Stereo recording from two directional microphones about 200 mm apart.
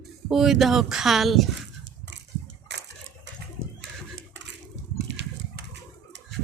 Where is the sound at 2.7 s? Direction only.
60° right (ahead or behind).